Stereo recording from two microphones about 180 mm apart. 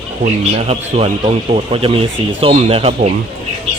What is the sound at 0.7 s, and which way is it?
Speech, 35° right (ahead or behind).